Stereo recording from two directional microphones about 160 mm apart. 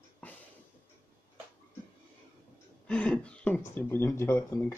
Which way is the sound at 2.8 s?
10° left (ahead or behind).